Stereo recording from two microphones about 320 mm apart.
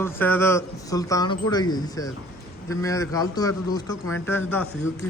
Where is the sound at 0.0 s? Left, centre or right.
Centre.